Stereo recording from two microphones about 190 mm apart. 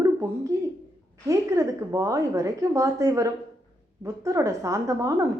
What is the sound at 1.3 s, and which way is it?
A woman's voice, 15° right (ahead or behind).